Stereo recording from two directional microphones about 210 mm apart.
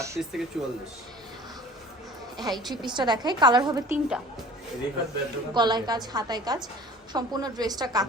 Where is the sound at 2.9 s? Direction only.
20° right (ahead or behind).